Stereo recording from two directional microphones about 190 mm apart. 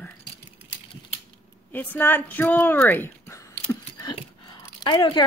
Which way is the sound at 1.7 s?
10° left (ahead or behind).